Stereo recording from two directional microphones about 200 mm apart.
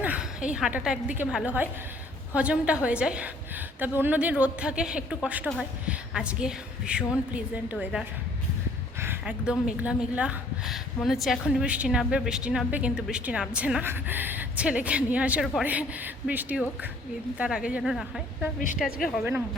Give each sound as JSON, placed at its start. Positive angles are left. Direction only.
{"t": 0.0, "sound": "a woman's voice", "side_deg": -5}